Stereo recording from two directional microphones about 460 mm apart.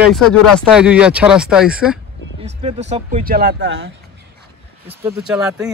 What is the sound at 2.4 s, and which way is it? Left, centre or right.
Speech, centre.